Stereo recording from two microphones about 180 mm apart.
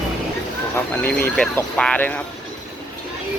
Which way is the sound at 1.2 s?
5° left (ahead or behind).